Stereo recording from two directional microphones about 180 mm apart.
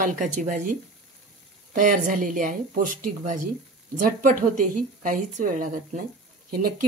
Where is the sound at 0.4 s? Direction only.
45° right (ahead or behind).